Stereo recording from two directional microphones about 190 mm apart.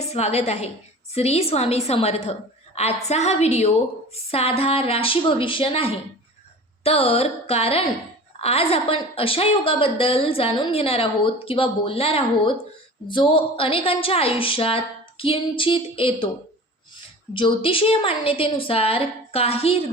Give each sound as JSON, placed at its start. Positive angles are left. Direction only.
{"t": 0.0, "sound": "a woman's voice", "side_deg": 35}
{"t": 17.3, "sound": "a woman's voice", "side_deg": 25}